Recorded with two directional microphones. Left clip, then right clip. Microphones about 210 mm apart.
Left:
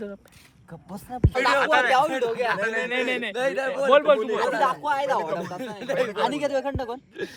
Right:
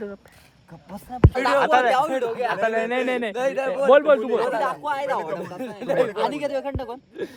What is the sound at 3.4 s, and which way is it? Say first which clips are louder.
Speech: right 1 dB; 25° right (ahead or behind).